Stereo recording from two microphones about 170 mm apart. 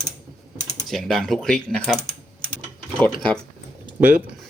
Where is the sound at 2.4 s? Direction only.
5° left (ahead or behind).